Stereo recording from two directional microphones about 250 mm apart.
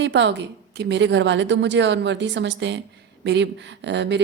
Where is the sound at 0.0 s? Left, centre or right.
Right.